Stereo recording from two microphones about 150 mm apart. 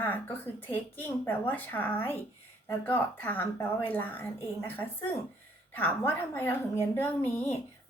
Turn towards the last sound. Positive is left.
turn(degrees=15)  # may be behind; listen again after turning